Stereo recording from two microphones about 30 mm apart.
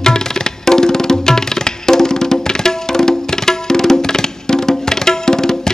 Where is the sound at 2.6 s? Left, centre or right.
Centre.